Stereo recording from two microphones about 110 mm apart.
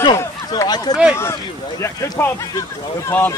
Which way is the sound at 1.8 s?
25° left (ahead or behind).